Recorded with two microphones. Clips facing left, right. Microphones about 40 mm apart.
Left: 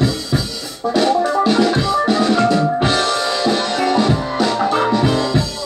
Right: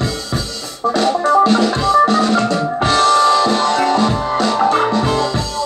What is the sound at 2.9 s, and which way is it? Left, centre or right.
Music, right.